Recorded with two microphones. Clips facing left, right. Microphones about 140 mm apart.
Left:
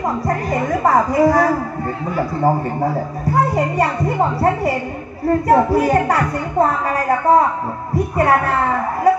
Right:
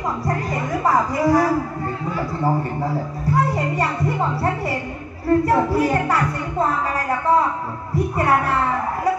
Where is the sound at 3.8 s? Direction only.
45° left (ahead or behind).